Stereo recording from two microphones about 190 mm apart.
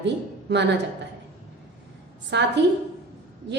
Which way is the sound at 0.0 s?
65° right (ahead or behind).